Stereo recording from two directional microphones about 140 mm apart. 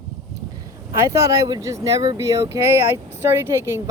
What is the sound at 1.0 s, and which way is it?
Speech, 20° right (ahead or behind).